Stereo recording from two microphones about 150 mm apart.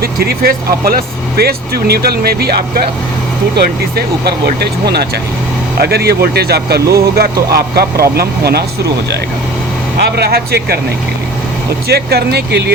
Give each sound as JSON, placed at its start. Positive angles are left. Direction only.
{"t": 0.0, "sound": "speech", "side_deg": -90}
{"t": 3.9, "sound": "speech", "side_deg": -90}
{"t": 10.2, "sound": "speech", "side_deg": -90}
{"t": 11.9, "sound": "speech", "side_deg": -90}